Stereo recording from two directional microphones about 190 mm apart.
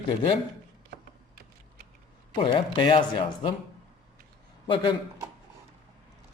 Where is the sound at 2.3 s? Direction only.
25° left (ahead or behind).